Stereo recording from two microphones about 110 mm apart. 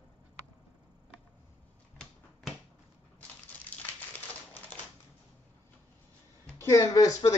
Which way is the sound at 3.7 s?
15° left (ahead or behind).